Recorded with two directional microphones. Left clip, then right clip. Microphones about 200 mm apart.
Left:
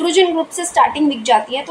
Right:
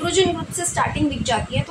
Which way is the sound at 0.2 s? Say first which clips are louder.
Left 5 dB; 45° left (ahead or behind).